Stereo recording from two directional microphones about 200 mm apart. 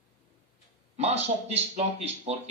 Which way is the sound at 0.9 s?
30° right (ahead or behind).